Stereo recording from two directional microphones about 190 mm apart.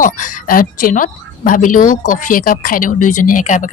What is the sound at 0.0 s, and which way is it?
Speech, 45° left (ahead or behind).